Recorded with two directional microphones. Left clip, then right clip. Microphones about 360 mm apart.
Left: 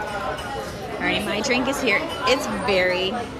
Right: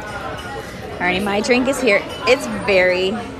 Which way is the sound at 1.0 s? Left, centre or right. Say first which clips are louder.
Right 5 dB; left.